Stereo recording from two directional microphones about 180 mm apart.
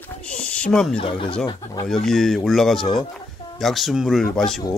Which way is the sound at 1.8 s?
Centre (ahead or behind).